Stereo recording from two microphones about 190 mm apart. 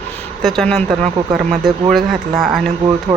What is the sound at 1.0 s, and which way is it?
Speech, 35° right (ahead or behind).